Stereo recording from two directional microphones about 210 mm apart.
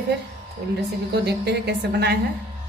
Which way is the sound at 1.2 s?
50° right (ahead or behind).